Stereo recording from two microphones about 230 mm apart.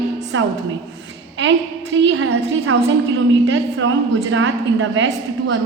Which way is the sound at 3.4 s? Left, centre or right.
Right.